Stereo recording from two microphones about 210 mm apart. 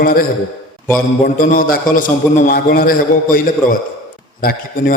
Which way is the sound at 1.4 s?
40° left (ahead or behind).